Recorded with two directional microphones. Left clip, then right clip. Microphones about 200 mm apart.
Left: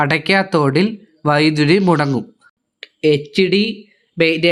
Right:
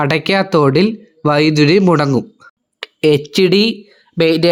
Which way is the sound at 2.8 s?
35° right (ahead or behind).